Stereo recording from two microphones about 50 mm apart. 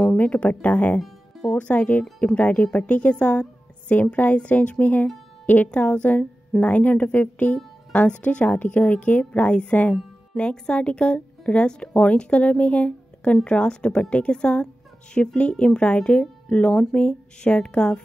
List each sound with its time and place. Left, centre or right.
0.2 s speech: left